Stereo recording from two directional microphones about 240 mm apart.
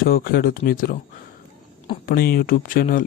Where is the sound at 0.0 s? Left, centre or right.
Left.